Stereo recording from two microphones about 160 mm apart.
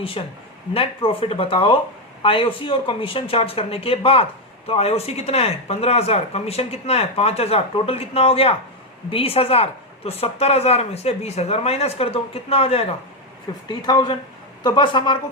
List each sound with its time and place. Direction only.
0.2 s speech: 35° left (ahead or behind)
13.7 s a woman's voice: 25° left (ahead or behind)